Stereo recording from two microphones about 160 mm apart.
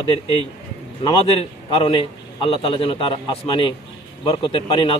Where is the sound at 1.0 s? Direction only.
40° left (ahead or behind).